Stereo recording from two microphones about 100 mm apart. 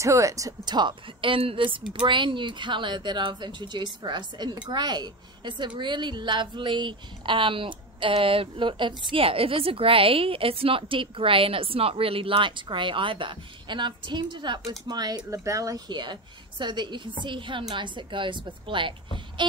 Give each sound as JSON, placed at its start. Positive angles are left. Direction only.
{"t": 0.0, "sound": "speech", "side_deg": -30}
{"t": 0.7, "sound": "speech", "side_deg": -55}
{"t": 14.7, "sound": "speech", "side_deg": -40}
{"t": 15.9, "sound": "speech", "side_deg": -50}